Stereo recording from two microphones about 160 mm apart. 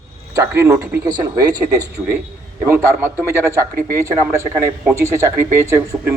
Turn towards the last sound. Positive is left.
turn(degrees=-15)  # may be behind; listen again after turning